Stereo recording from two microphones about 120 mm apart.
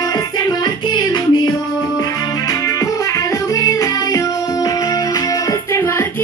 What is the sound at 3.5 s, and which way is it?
Music, 30° left (ahead or behind).